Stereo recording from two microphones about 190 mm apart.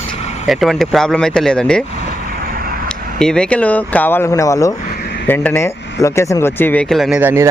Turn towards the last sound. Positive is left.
turn(degrees=-10)  # may be behind; listen again after turning